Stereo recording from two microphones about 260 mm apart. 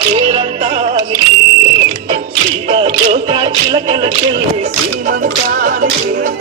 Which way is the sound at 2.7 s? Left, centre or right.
Right.